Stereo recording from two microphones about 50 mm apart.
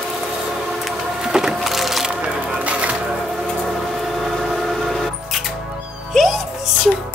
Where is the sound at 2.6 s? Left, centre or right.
Right.